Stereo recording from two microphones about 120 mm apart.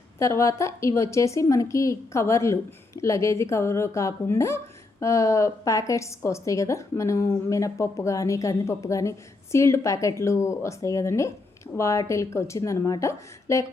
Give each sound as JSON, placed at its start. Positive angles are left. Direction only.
{"t": 0.2, "sound": "a woman's voice", "side_deg": 25}